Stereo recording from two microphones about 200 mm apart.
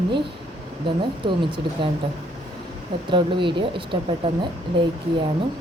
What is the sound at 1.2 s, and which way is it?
Speech, 25° right (ahead or behind).